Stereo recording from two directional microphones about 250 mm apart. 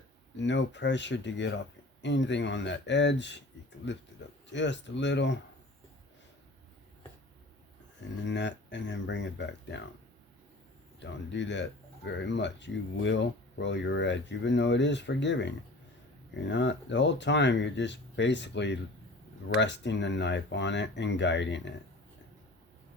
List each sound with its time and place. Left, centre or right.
0.3 s speech: left
8.2 s speech: left
11.0 s speech: left